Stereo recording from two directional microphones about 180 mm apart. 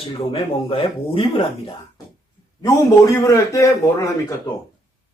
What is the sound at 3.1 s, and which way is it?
Speech, 20° left (ahead or behind).